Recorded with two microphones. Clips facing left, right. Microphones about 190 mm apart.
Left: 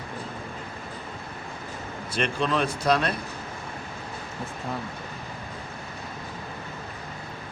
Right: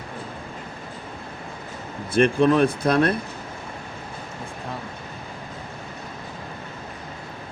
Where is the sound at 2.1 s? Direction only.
55° right (ahead or behind).